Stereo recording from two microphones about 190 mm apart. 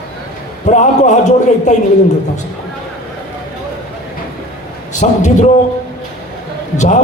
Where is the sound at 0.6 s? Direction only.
40° left (ahead or behind).